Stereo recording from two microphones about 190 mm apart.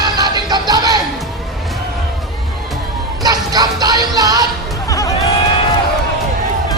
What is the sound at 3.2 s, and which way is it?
Music, 20° right (ahead or behind).